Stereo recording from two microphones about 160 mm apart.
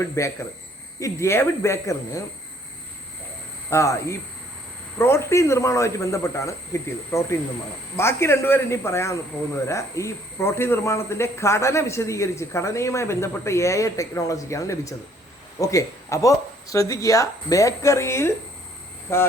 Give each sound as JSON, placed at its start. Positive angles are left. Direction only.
{"t": 0.0, "sound": "speech", "side_deg": 15}
{"t": 3.7, "sound": "speech", "side_deg": 20}